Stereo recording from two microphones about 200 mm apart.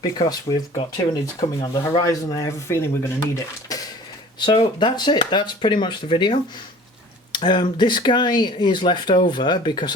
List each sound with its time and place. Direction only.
0.0 s speech: 20° left (ahead or behind)